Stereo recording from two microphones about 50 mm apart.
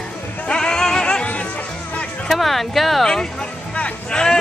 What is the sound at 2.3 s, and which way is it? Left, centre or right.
Speech, centre.